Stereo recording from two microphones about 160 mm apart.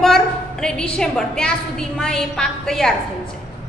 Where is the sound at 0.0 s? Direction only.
5° left (ahead or behind).